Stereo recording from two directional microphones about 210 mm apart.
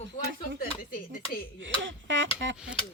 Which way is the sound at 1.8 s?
60° right (ahead or behind).